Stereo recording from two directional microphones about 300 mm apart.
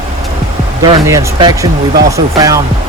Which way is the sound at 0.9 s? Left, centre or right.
Centre.